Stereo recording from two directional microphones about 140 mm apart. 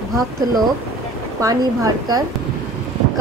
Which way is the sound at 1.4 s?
25° right (ahead or behind).